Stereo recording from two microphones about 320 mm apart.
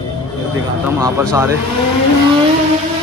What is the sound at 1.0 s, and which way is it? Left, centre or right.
Speech, centre.